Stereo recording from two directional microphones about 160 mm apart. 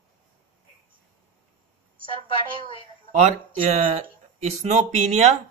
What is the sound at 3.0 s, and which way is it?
Speech, 50° right (ahead or behind).